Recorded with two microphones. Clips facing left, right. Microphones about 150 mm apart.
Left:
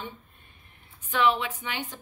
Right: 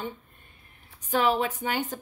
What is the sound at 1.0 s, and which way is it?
Speech, 40° right (ahead or behind).